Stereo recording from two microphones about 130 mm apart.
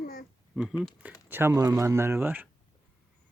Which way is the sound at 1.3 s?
15° right (ahead or behind).